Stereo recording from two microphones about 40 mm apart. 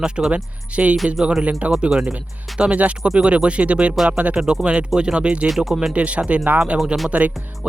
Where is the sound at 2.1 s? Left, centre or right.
Right.